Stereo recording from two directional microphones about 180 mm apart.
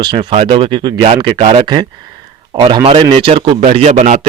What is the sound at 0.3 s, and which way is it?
Speech, 35° right (ahead or behind).